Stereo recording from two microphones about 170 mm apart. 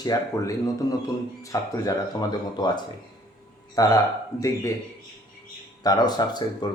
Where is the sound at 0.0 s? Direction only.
20° left (ahead or behind).